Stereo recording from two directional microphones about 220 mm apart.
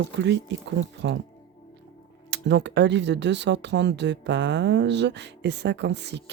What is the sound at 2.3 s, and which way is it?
Speech, 50° right (ahead or behind).